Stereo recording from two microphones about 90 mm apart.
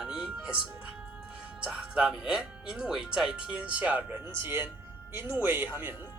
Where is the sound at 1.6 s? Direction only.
10° right (ahead or behind).